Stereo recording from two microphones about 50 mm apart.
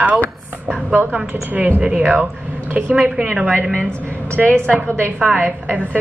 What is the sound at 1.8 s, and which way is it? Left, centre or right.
Speech, right.